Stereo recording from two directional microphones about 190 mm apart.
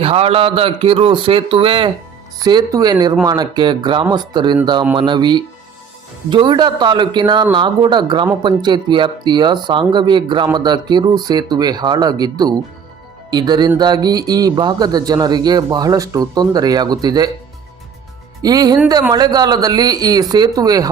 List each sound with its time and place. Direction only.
0.0 s speech: 30° right (ahead or behind)
18.4 s speech: 20° right (ahead or behind)